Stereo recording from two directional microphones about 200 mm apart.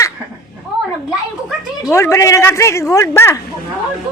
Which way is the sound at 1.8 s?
15° left (ahead or behind).